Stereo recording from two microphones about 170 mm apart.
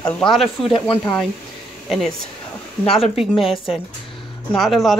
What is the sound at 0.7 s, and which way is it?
Speech, 30° left (ahead or behind).